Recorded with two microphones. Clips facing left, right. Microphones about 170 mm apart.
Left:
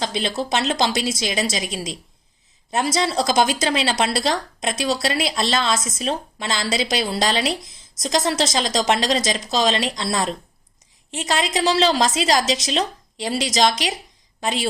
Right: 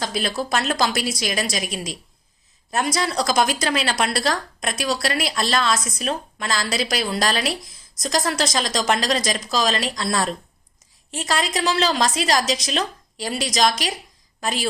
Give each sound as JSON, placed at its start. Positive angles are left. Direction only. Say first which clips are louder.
{"t": 0.0, "sound": "a woman's voice", "louder": "left 1 dB", "side_deg": 25}